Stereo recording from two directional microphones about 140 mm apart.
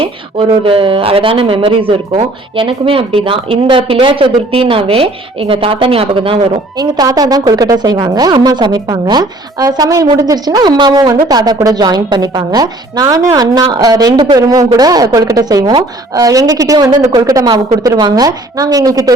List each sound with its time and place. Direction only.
0.0 s speech: 40° right (ahead or behind)
6.7 s a woman's voice: 25° right (ahead or behind)